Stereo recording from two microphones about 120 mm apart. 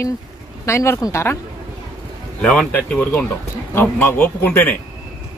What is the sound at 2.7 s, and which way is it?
Speech, 15° left (ahead or behind).